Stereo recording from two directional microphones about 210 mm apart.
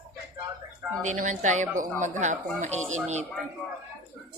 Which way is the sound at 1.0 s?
35° right (ahead or behind).